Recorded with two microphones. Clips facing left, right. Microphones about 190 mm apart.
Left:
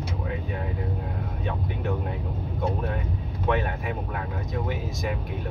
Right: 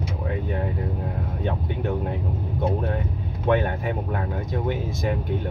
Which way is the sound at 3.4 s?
35° right (ahead or behind).